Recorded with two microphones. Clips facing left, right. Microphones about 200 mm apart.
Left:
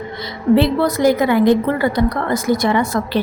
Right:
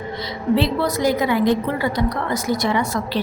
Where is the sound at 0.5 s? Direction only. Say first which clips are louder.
Left 5 dB; 55° left (ahead or behind).